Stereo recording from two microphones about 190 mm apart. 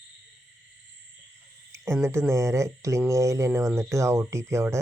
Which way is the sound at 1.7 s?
15° right (ahead or behind).